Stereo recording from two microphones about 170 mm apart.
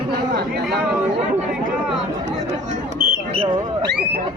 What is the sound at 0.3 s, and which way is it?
Speech, 70° right (ahead or behind).